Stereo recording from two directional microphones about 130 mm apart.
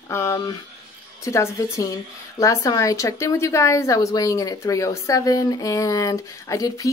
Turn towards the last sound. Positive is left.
turn(degrees=25)  # may be behind; listen again after turning